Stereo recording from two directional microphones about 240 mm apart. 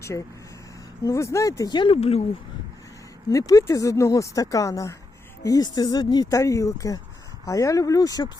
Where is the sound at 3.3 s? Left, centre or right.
Centre.